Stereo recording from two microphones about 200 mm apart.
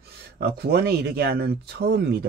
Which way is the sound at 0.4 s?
55° right (ahead or behind).